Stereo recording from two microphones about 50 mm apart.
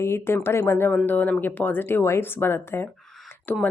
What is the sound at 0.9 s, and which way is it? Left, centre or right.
Speech, left.